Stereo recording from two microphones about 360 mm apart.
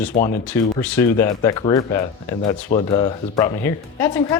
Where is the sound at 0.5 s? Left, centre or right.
Centre.